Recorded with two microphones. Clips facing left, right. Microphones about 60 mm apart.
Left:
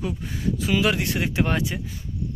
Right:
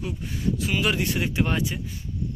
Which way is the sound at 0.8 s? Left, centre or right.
Left.